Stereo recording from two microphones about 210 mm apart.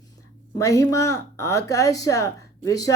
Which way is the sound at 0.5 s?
15° left (ahead or behind).